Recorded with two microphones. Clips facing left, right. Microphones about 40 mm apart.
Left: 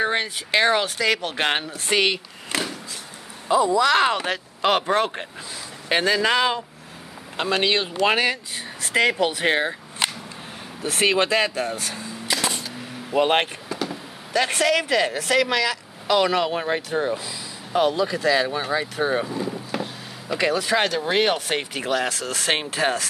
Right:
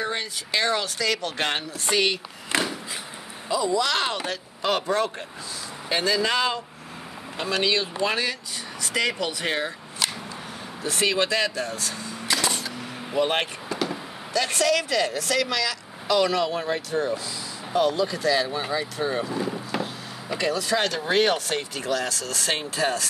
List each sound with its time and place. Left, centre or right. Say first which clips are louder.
0.0 s speech: left 6 dB; left
3.4 s speech: left 5 dB; left
4.6 s speech: left 3 dB; left
12.3 s a sound: even; centre
13.1 s speech: left 4 dB; left
13.7 s vehicle: right 1 dB; centre
14.3 s speech: left 2 dB; left
17.7 s speech: left 2 dB; left
18.0 s speech: left 3 dB; left
19.3 s vehicle: even; centre
20.3 s speech: left 3 dB; left
20.9 s speech: left 1 dB; centre
21.5 s speech: left 3 dB; left